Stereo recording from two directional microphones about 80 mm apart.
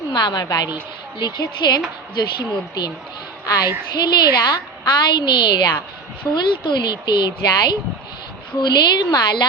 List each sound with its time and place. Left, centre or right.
0.1 s a woman's voice: left
3.4 s a woman's voice: left
3.9 s a woman's voice: left